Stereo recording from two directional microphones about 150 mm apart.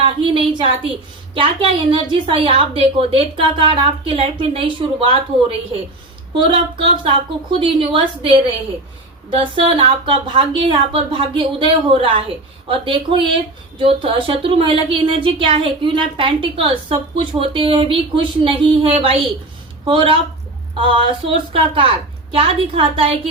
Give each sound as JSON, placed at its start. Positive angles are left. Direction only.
{"t": 0.0, "sound": "speech", "side_deg": -35}
{"t": 9.4, "sound": "speech", "side_deg": -35}